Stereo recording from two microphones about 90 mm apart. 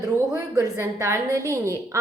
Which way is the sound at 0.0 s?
40° right (ahead or behind).